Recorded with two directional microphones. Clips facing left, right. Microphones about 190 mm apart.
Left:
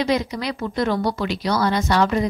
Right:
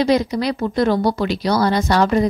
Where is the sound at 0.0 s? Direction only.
35° right (ahead or behind).